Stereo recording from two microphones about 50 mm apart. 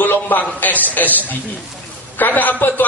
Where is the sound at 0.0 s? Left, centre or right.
Left.